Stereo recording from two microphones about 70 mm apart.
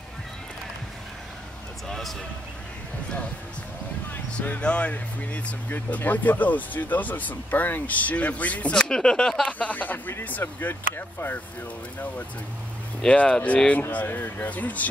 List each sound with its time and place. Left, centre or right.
1.9 s a sound: centre
4.3 s speech: centre
9.5 s speech: left
13.0 s speech: centre
13.9 s speech: left